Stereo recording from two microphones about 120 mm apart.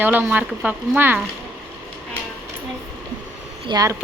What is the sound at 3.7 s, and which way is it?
Speech, 30° right (ahead or behind).